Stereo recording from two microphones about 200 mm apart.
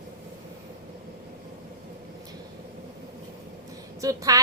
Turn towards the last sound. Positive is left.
turn(degrees=-15)  # may be behind; listen again after turning